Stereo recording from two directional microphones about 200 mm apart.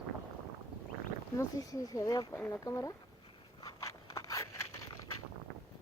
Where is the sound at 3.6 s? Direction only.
15° left (ahead or behind).